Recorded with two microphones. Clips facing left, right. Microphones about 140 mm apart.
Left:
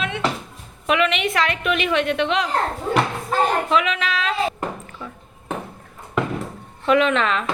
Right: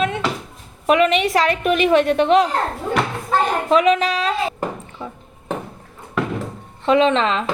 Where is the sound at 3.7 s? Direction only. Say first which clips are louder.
Right 6 dB; 40° right (ahead or behind).